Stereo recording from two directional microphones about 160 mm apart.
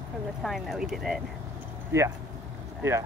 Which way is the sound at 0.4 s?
Centre (ahead or behind).